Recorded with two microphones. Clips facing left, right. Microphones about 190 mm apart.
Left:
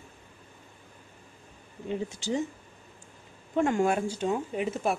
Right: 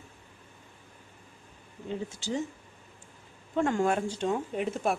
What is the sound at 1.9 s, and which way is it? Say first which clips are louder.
Speech: left 3 dB; 15° left (ahead or behind).